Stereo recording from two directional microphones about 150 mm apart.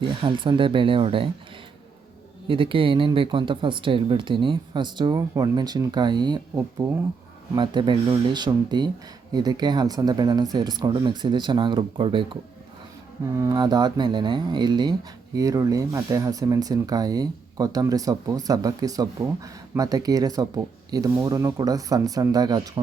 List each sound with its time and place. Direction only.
0.0 s speech: 35° right (ahead or behind)
2.5 s speech: 35° right (ahead or behind)
13.3 s speech: 25° right (ahead or behind)